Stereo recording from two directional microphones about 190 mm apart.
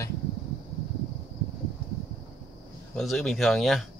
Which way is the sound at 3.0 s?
Centre (ahead or behind).